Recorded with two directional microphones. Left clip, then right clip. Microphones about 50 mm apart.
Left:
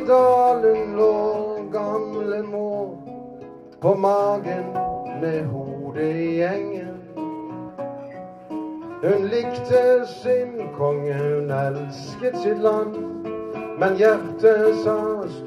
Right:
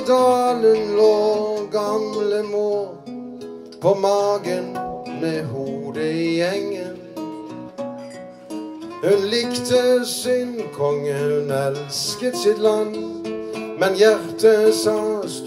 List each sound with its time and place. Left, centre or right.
0.2 s music: left
4.2 s music: left
9.0 s music: left